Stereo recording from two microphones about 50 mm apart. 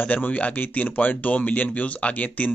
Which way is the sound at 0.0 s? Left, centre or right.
Left.